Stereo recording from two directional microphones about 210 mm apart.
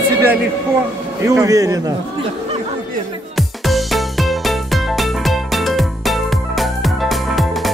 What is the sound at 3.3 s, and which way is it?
Music, centre (ahead or behind).